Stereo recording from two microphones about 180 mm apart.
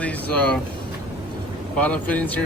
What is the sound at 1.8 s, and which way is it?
Speech, 5° left (ahead or behind).